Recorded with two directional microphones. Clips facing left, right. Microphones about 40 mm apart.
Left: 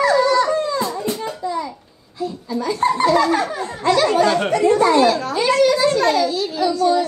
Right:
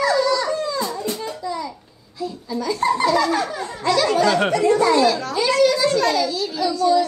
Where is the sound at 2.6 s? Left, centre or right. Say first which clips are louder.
Left 2 dB; left.